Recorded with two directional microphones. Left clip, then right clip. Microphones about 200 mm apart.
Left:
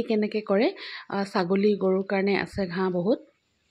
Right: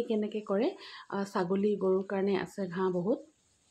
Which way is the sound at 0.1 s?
30° left (ahead or behind).